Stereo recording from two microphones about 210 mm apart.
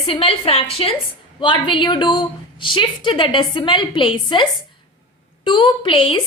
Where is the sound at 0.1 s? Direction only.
25° left (ahead or behind).